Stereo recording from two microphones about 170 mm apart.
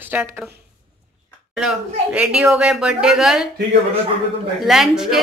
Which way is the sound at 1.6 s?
5° right (ahead or behind).